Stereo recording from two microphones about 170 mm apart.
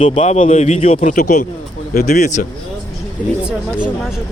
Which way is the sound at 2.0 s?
45° left (ahead or behind).